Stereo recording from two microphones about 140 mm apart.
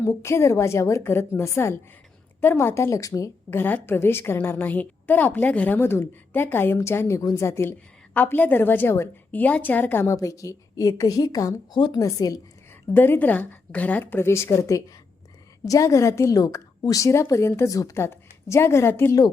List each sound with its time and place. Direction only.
0.0 s a woman's voice: 20° left (ahead or behind)